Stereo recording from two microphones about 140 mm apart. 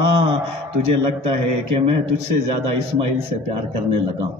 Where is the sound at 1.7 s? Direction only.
40° right (ahead or behind).